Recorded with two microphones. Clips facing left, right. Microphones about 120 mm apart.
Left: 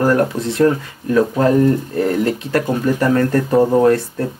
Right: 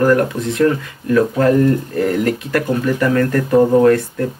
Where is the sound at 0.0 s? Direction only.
30° left (ahead or behind).